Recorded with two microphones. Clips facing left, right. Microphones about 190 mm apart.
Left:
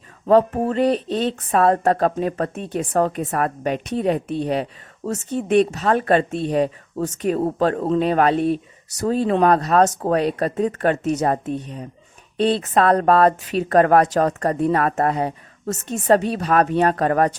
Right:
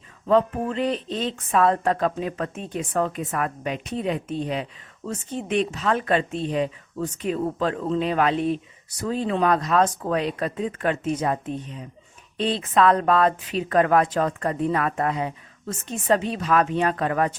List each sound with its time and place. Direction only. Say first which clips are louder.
0.3 s speech: left 4 dB; 40° left (ahead or behind)